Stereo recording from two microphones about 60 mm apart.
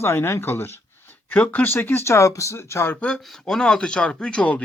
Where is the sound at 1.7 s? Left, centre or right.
Left.